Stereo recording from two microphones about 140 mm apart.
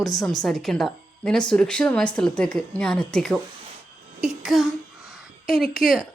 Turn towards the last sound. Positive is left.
turn(degrees=0)  # may be behind; listen again after turning